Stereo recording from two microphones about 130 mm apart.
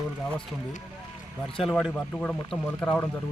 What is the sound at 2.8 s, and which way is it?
Speech, 10° left (ahead or behind).